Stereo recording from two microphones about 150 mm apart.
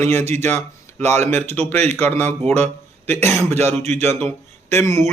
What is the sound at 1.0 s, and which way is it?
A man's voice, 50° right (ahead or behind).